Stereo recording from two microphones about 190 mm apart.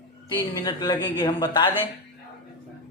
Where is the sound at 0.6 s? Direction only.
20° left (ahead or behind).